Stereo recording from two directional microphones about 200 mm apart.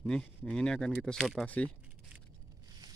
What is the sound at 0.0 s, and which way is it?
Speech, 5° left (ahead or behind).